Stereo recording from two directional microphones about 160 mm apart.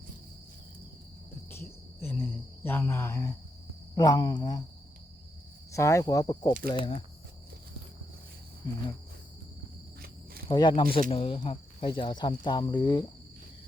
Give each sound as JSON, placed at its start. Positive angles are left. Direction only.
{"t": 1.5, "sound": "cricket", "side_deg": 15}
{"t": 3.9, "sound": "speech", "side_deg": 25}
{"t": 5.7, "sound": "speech", "side_deg": 20}
{"t": 6.7, "sound": "speech", "side_deg": 30}
{"t": 10.5, "sound": "speech", "side_deg": 30}